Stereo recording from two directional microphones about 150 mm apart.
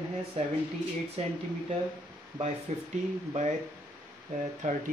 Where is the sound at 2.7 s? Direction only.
50° right (ahead or behind).